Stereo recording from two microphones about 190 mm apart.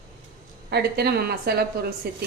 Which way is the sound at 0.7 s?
55° right (ahead or behind).